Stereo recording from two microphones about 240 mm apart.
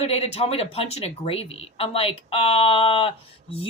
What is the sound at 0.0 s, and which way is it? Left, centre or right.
Speech, left.